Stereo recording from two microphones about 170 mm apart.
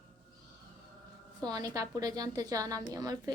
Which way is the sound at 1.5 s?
20° right (ahead or behind).